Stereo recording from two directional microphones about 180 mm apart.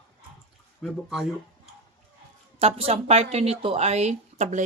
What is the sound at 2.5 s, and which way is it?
Speech, 35° right (ahead or behind).